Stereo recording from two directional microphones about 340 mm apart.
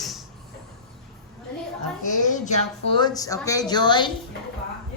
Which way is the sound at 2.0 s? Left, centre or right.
Left.